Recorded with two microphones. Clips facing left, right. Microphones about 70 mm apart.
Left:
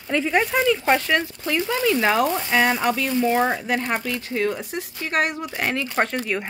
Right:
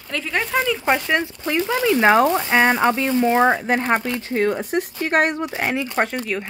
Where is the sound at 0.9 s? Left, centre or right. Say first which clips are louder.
Even; right.